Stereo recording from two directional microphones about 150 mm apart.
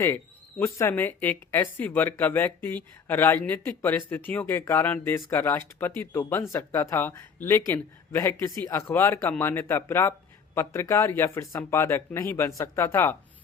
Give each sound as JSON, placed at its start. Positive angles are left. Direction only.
{"t": 0.6, "sound": "speech", "side_deg": 15}